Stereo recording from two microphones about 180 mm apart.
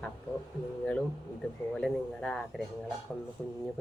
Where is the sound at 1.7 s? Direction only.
5° left (ahead or behind).